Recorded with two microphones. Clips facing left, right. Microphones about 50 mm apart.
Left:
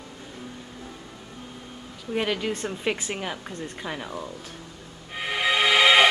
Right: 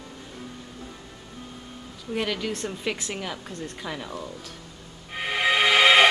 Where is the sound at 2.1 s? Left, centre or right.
Centre.